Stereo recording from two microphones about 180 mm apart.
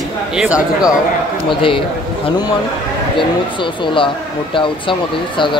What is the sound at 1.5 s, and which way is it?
Speech, 30° left (ahead or behind).